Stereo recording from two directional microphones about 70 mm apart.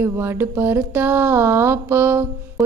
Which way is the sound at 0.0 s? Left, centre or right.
Right.